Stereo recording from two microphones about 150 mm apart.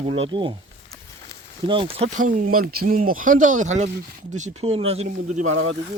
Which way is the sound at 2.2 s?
60° right (ahead or behind).